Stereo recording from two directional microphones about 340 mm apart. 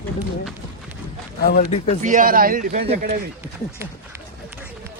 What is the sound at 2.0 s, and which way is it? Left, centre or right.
A man's voice, right.